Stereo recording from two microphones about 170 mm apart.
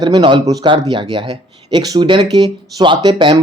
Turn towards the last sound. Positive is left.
turn(degrees=-25)  # may be behind; listen again after turning